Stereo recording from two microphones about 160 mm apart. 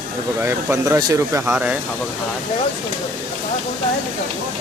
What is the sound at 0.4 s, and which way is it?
Speech, 20° right (ahead or behind).